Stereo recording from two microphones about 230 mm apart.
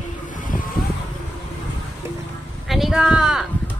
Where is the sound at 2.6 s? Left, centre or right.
Centre.